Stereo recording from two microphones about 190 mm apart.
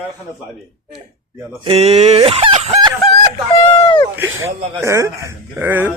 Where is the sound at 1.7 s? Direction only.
35° right (ahead or behind).